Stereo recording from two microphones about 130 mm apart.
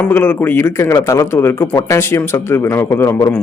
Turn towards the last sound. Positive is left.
turn(degrees=20)  # may be behind; listen again after turning